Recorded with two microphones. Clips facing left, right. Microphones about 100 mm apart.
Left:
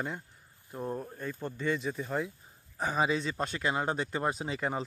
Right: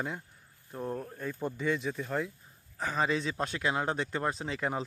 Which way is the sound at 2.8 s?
15° left (ahead or behind).